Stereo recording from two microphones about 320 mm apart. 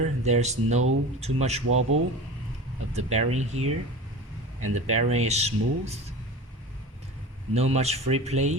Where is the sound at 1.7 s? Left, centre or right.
Right.